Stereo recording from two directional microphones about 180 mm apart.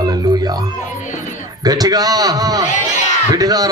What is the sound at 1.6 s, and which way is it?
A man's voice, 20° right (ahead or behind).